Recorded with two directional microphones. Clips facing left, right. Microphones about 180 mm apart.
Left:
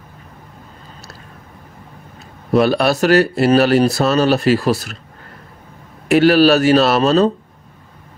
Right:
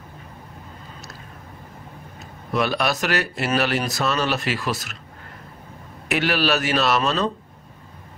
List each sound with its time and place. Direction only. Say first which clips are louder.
2.5 s speech: left 8 dB; 35° left (ahead or behind)
6.0 s speech: left 11 dB; 40° left (ahead or behind)